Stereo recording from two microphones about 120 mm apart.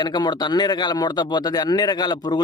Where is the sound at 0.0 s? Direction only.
35° left (ahead or behind).